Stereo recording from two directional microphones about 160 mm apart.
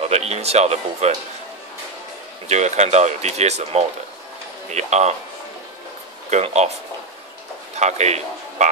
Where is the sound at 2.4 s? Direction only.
45° right (ahead or behind).